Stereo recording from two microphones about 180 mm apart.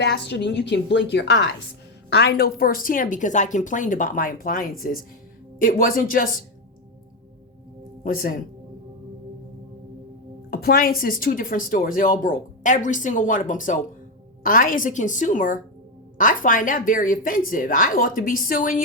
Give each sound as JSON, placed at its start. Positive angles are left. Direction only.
{"t": 0.0, "sound": "a woman's voice", "side_deg": 70}
{"t": 8.0, "sound": "a woman's voice", "side_deg": 55}
{"t": 10.5, "sound": "a woman's voice", "side_deg": 55}